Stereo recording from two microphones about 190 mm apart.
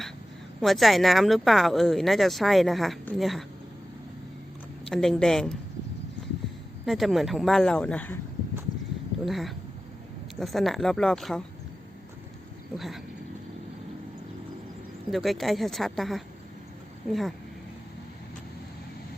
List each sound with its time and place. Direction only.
0.6 s speech: centre (ahead or behind)
4.9 s speech: centre (ahead or behind)
6.8 s speech: centre (ahead or behind)
9.2 s speech: centre (ahead or behind)
12.7 s speech: centre (ahead or behind)
15.1 s speech: centre (ahead or behind)